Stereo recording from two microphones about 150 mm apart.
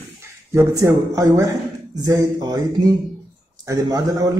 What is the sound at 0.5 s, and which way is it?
A man's voice, 20° right (ahead or behind).